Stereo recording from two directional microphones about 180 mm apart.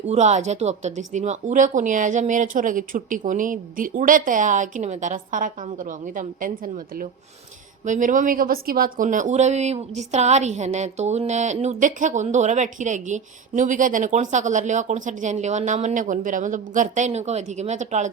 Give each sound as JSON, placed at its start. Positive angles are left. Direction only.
{"t": 0.1, "sound": "speech", "side_deg": -40}